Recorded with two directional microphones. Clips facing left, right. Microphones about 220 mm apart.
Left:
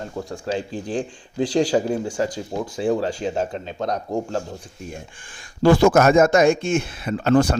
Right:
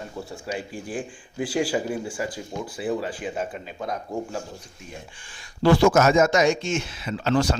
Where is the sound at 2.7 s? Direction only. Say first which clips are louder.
Left 6 dB; 25° left (ahead or behind).